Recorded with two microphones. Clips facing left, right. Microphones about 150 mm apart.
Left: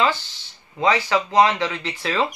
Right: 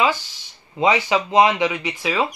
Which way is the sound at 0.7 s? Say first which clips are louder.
Right 1 dB; 20° right (ahead or behind).